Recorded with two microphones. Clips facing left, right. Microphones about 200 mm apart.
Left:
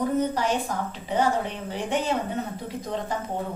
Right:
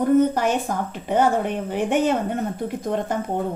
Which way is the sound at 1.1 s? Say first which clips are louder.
Right 5 dB; 55° right (ahead or behind).